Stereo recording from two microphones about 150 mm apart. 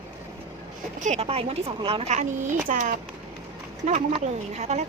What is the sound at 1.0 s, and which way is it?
Speech, 45° right (ahead or behind).